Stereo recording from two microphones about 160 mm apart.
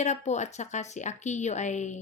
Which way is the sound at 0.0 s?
45° left (ahead or behind).